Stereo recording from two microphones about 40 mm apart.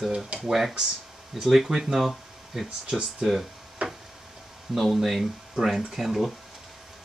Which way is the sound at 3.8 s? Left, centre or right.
Right.